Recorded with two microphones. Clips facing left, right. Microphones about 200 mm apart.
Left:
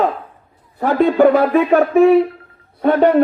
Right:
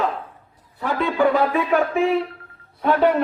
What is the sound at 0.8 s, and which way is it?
Speech, 45° left (ahead or behind).